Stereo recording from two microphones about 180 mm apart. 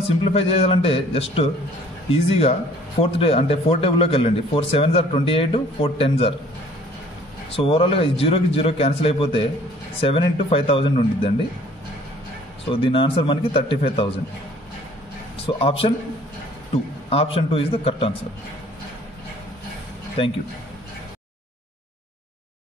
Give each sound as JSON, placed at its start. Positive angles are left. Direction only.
{"t": 0.2, "sound": "a man's voice", "side_deg": 30}
{"t": 7.5, "sound": "a man's voice", "side_deg": 30}
{"t": 12.6, "sound": "speech", "side_deg": 30}
{"t": 15.4, "sound": "a man's voice", "side_deg": 30}
{"t": 17.1, "sound": "a man's voice", "side_deg": 30}